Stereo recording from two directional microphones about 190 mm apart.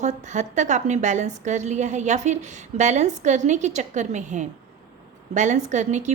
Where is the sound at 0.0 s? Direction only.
40° right (ahead or behind).